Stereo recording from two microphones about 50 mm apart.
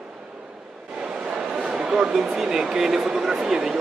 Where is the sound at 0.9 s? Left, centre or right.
Centre.